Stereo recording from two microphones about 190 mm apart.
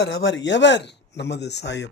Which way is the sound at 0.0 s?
65° left (ahead or behind).